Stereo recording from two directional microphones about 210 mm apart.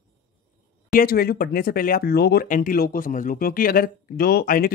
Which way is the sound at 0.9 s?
45° left (ahead or behind).